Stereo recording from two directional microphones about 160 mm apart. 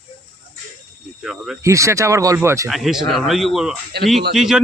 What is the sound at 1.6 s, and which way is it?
Speech, 20° right (ahead or behind).